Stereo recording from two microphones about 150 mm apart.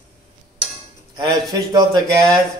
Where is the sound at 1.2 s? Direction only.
30° right (ahead or behind).